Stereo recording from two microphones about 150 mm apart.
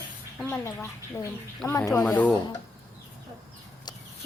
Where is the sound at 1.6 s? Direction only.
20° left (ahead or behind).